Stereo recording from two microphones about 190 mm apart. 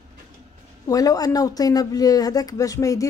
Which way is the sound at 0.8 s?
20° left (ahead or behind).